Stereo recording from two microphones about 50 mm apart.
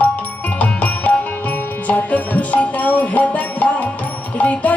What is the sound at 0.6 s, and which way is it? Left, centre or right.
Music, left.